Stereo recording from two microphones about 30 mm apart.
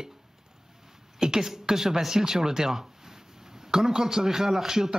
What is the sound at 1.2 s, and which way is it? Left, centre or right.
Speech, centre.